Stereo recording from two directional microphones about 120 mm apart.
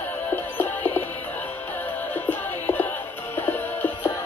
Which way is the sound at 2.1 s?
15° left (ahead or behind).